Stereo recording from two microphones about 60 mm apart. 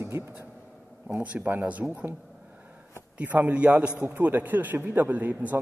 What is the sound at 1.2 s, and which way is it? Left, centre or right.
Speech, right.